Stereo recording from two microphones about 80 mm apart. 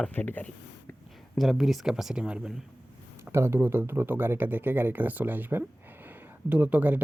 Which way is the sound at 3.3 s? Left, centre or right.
Right.